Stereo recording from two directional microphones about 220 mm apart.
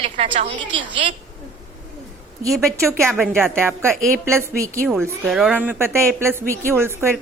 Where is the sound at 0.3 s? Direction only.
25° right (ahead or behind).